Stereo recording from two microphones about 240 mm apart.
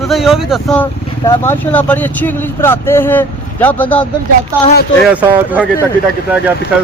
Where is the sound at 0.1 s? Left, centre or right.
Centre.